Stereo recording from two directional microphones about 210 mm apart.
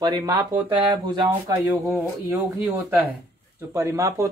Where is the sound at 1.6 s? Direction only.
10° right (ahead or behind).